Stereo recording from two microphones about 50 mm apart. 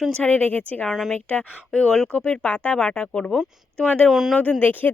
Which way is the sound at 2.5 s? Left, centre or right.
Left.